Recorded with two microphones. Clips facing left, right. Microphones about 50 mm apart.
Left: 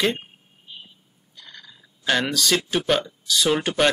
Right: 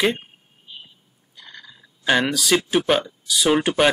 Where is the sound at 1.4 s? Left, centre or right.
Centre.